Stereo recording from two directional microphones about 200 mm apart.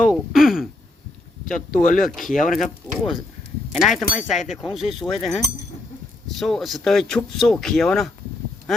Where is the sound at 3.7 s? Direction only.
Centre (ahead or behind).